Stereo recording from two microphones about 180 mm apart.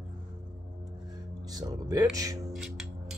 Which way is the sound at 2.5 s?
Centre (ahead or behind).